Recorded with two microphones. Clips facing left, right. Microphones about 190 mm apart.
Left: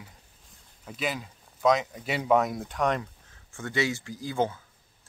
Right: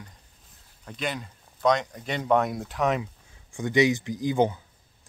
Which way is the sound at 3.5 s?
15° right (ahead or behind).